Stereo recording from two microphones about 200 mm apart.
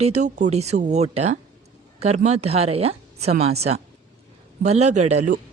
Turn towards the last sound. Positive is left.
turn(degrees=-35)  # may be behind; listen again after turning